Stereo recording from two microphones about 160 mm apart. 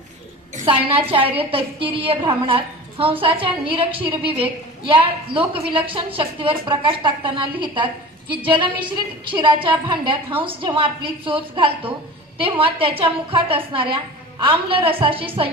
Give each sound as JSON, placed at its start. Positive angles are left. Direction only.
{"t": 0.6, "sound": "a woman's voice", "side_deg": -35}